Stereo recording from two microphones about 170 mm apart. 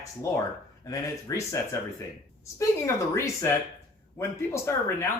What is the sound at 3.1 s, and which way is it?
Speech, 15° left (ahead or behind).